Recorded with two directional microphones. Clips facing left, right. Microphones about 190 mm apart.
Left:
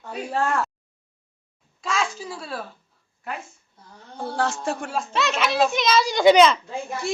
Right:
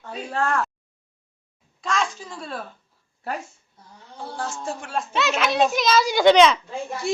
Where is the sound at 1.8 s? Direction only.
5° left (ahead or behind).